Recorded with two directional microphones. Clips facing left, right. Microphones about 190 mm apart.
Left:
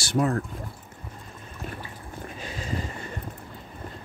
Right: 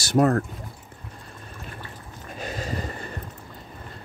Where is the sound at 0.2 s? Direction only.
60° right (ahead or behind).